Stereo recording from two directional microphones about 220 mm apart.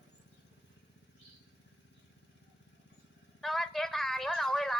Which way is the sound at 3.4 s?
Centre (ahead or behind).